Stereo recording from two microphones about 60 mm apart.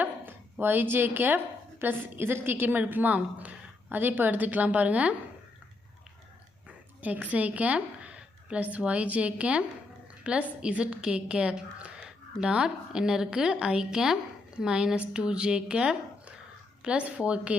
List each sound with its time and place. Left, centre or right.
0.0 s a sound: right
1.8 s a woman's voice: right
6.7 s a woman's voice: right